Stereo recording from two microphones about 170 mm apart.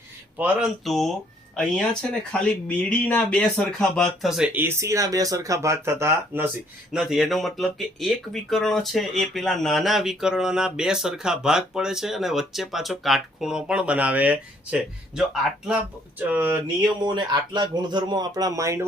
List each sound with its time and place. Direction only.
0.3 s speech: 5° right (ahead or behind)
6.9 s speech: centre (ahead or behind)
17.0 s speech: 25° right (ahead or behind)